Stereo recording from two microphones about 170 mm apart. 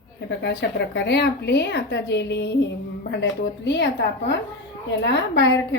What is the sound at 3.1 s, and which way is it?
Speech, 90° left.